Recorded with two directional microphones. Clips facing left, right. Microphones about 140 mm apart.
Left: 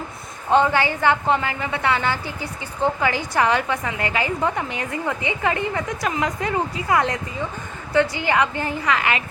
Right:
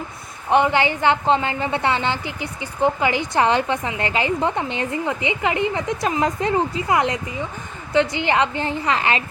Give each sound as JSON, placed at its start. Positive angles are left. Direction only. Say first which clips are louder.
{"t": 0.5, "sound": "a woman's voice", "louder": "right 1 dB", "side_deg": -20}